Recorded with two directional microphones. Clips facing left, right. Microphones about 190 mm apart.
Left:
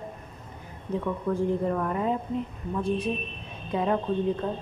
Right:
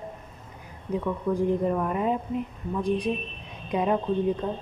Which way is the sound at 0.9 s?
15° right (ahead or behind).